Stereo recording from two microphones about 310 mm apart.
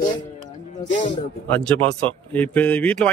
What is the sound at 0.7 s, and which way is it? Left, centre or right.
Speech, centre.